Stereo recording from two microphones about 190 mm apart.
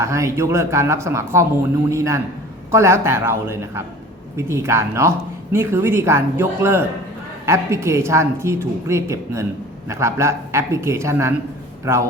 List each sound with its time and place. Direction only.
0.0 s speech: 15° right (ahead or behind)